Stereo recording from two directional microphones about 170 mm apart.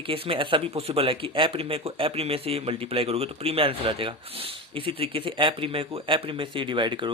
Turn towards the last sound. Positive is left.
turn(degrees=-30)  # may be behind; listen again after turning